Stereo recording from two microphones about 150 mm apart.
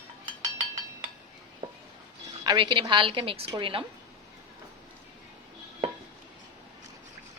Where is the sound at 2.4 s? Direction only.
30° right (ahead or behind).